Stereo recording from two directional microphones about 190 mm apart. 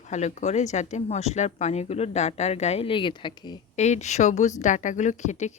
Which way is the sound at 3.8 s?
35° left (ahead or behind).